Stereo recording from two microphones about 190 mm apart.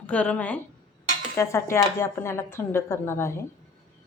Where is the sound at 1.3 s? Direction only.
15° left (ahead or behind).